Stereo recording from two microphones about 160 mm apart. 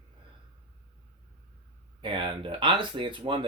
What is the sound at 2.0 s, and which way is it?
Speech, 30° right (ahead or behind).